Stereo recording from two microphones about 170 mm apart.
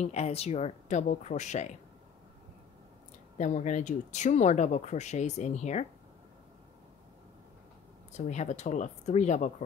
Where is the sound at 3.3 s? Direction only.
45° left (ahead or behind).